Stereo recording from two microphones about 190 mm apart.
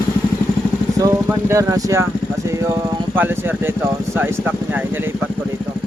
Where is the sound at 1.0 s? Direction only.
15° right (ahead or behind).